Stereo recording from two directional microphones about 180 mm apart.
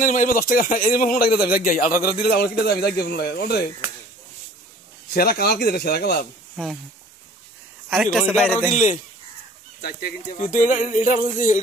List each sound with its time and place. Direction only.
0.0 s a man's voice: 45° left (ahead or behind); by 3.6 s 60° left (ahead or behind)
5.1 s speech: 60° left (ahead or behind)
6.5 s speech: centre (ahead or behind)
8.0 s a man's voice: centre (ahead or behind)
9.8 s speech: 60° left (ahead or behind)
10.3 s a man's voice: 45° left (ahead or behind)